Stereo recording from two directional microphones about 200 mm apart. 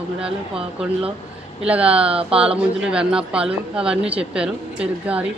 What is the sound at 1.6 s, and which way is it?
Speech, 5° right (ahead or behind).